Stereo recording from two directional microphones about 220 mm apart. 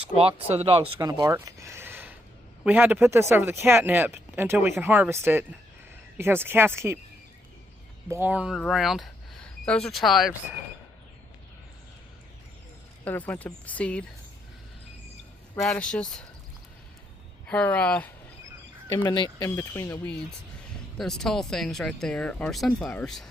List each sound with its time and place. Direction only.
0.2 s speech: 25° right (ahead or behind)
8.0 s speech: 10° right (ahead or behind)
13.1 s speech: 5° left (ahead or behind)
15.5 s speech: 5° left (ahead or behind)
17.5 s speech: 5° left (ahead or behind)
19.0 s speech: 20° left (ahead or behind); by 23.2 s 5° left (ahead or behind)